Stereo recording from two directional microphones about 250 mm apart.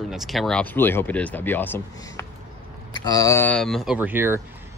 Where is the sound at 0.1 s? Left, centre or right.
Centre.